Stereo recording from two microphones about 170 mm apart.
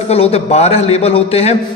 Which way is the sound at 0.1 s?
35° left (ahead or behind).